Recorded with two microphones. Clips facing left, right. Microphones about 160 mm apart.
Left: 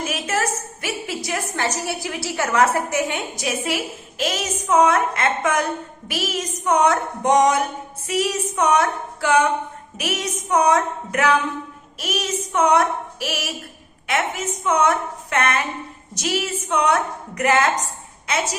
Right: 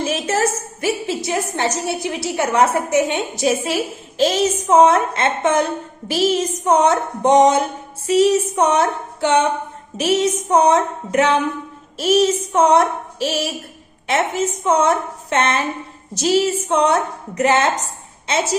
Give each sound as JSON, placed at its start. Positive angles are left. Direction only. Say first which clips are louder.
{"t": 0.0, "sound": "a woman's voice", "louder": "right 5 dB", "side_deg": -30}